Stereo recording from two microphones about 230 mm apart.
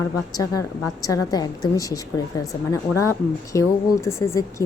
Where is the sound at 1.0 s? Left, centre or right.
Centre.